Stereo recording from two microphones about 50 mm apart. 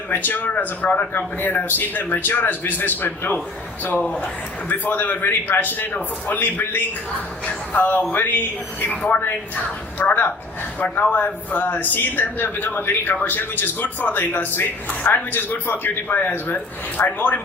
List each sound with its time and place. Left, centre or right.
0.1 s speech: left
3.9 s a woman's voice: left
4.7 s a woman's voice: left